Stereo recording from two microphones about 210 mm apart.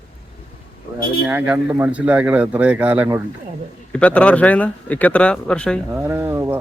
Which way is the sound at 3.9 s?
5° left (ahead or behind).